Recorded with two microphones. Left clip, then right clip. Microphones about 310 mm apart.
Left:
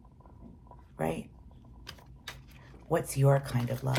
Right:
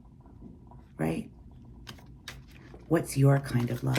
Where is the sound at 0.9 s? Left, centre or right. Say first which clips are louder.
Right 1 dB; centre.